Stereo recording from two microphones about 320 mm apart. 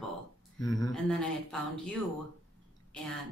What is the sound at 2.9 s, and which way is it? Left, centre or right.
Speech, centre.